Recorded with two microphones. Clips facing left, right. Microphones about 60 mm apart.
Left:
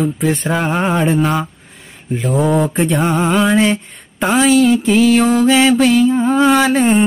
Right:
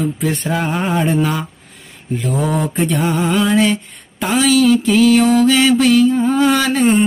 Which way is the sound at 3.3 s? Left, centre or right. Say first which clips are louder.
Even; centre.